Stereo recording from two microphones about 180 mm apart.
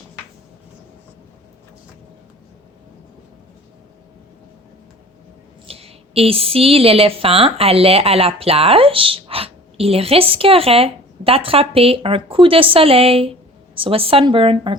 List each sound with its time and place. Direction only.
5.6 s a woman's voice: 35° right (ahead or behind)